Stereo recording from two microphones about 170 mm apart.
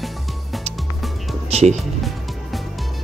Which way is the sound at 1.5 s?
35° right (ahead or behind).